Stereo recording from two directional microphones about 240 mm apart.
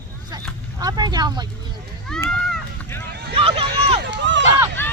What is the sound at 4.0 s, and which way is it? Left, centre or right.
Run, right.